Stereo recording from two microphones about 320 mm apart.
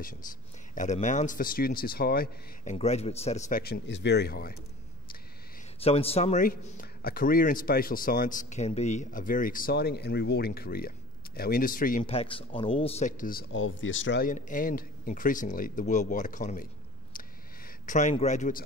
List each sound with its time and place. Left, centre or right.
0.7 s a man's voice: left
5.8 s a man's voice: centre
17.8 s a man's voice: left